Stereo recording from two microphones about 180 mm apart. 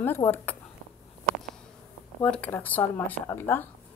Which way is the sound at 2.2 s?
5° left (ahead or behind).